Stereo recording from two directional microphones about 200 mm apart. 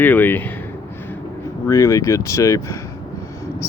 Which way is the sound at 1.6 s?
15° left (ahead or behind).